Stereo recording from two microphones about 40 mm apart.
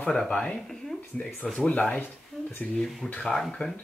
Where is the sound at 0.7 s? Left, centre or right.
Centre.